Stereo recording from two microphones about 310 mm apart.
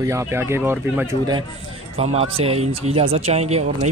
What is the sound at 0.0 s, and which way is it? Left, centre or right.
Speech, centre.